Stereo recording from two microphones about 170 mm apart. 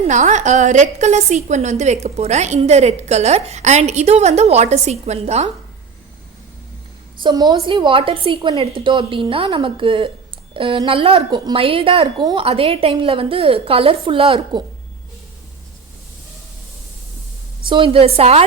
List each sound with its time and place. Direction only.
0.1 s a woman's voice: 45° right (ahead or behind)
7.2 s a woman's voice: 25° right (ahead or behind)
17.7 s a woman's voice: 30° right (ahead or behind)